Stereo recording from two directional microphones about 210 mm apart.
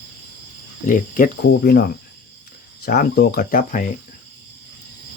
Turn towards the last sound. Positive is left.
turn(degrees=40)  # may be behind; listen again after turning